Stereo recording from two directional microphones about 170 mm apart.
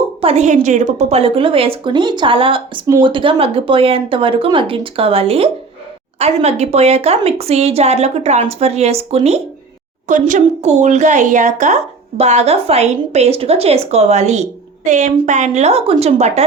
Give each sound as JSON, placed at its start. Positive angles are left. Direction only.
{"t": 0.2, "sound": "a woman's voice", "side_deg": -40}